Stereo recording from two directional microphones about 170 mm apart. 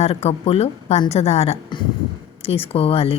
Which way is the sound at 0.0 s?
40° left (ahead or behind).